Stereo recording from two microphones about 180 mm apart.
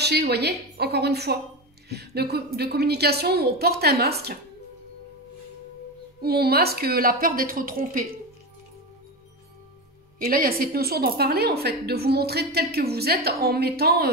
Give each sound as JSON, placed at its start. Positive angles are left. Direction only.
{"t": 0.0, "sound": "a woman's voice", "side_deg": -65}
{"t": 6.2, "sound": "a woman's voice", "side_deg": -60}
{"t": 10.2, "sound": "a woman's voice", "side_deg": -55}